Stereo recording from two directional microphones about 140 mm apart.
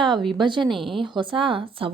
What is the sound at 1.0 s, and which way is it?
Speech, 35° right (ahead or behind).